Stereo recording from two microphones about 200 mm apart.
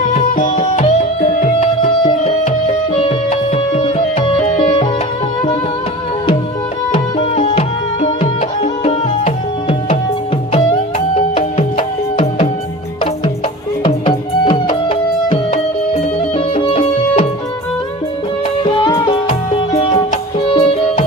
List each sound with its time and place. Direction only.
0.1 s music: 40° left (ahead or behind)
6.9 s music: 25° left (ahead or behind)
13.8 s music: 25° left (ahead or behind)
18.6 s music: 25° left (ahead or behind)